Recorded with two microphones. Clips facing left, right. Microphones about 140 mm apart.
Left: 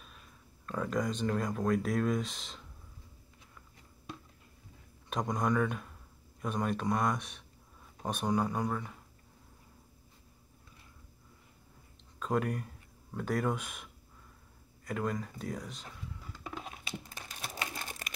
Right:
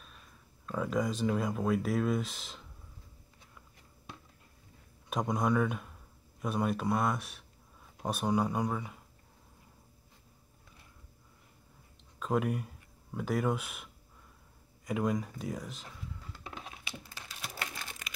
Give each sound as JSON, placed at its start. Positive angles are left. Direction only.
{"t": 0.7, "sound": "speech", "side_deg": -5}
{"t": 5.1, "sound": "speech", "side_deg": -10}
{"t": 12.2, "sound": "speech", "side_deg": -5}
{"t": 14.9, "sound": "speech", "side_deg": -10}
{"t": 17.8, "sound": "pigeon", "side_deg": 45}